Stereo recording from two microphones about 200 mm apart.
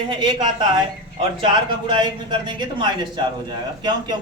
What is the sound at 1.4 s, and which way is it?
Speech, 25° right (ahead or behind).